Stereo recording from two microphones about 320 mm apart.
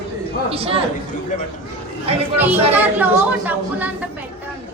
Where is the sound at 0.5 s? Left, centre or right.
Centre.